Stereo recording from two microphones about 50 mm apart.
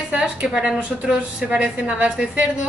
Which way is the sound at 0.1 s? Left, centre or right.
Centre.